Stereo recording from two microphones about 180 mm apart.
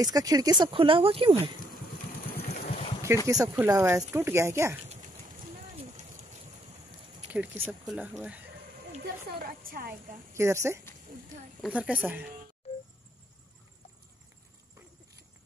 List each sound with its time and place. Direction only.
0.0 s speech: 20° right (ahead or behind)
2.5 s vehicle: 50° left (ahead or behind)
3.3 s speech: 20° right (ahead or behind)
4.8 s a sound: 40° right (ahead or behind)
7.0 s a sound: 30° right (ahead or behind)
7.2 s speech: 10° right (ahead or behind)
9.0 s a woman's voice: 55° right (ahead or behind)
10.3 s speech: 15° right (ahead or behind)